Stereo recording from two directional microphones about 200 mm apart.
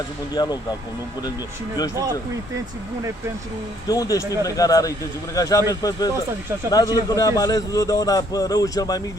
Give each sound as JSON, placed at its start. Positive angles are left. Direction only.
{"t": 0.3, "sound": "a man's voice", "side_deg": 20}
{"t": 3.8, "sound": "a man's voice", "side_deg": 20}